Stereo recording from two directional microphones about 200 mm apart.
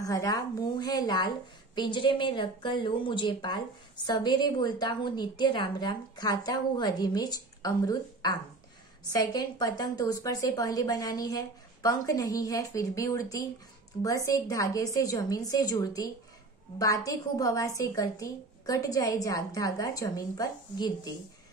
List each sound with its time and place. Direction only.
0.0 s a woman's voice: 15° left (ahead or behind)